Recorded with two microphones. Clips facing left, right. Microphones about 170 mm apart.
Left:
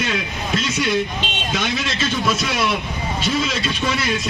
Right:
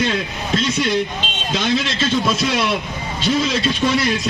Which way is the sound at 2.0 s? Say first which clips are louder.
Right 3 dB; 25° right (ahead or behind).